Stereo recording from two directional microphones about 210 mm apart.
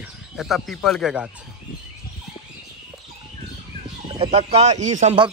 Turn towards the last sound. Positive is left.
turn(degrees=-30)  # may be behind; listen again after turning